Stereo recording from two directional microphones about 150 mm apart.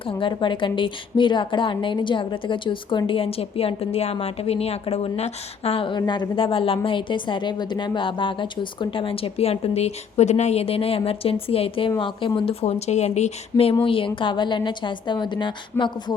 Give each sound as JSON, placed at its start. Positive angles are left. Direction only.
{"t": 0.1, "sound": "a woman's voice", "side_deg": 35}
{"t": 15.7, "sound": "speech", "side_deg": 15}